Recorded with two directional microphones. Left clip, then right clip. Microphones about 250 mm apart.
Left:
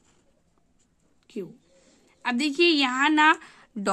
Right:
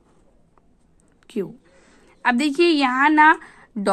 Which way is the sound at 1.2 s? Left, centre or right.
Centre.